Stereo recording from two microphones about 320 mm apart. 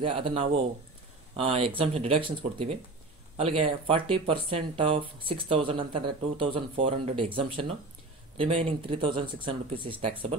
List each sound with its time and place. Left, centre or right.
0.0 s speech: centre